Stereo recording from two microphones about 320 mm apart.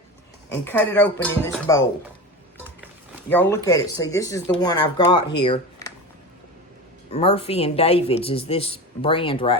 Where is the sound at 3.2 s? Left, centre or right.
Centre.